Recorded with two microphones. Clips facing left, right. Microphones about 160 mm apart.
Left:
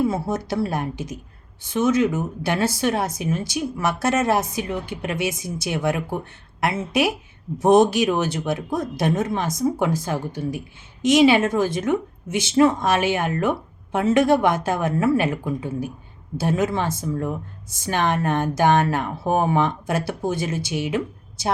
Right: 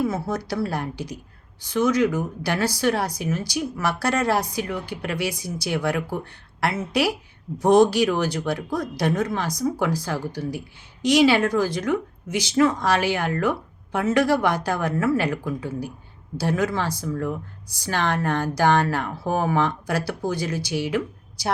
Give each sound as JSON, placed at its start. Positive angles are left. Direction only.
{"t": 0.0, "sound": "speech", "side_deg": 25}